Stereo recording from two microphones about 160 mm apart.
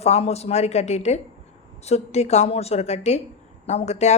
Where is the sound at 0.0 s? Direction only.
40° left (ahead or behind).